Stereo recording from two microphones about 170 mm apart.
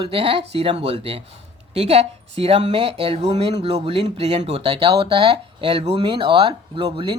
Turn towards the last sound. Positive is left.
turn(degrees=-30)  # may be behind; listen again after turning